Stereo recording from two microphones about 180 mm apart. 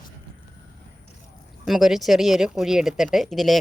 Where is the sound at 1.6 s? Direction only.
Centre (ahead or behind).